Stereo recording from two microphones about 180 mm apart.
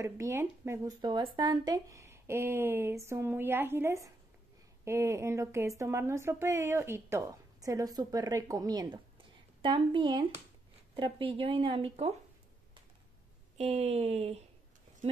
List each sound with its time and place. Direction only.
0.0 s speech: 15° right (ahead or behind); by 12.1 s 30° right (ahead or behind)
13.6 s speech: 35° right (ahead or behind)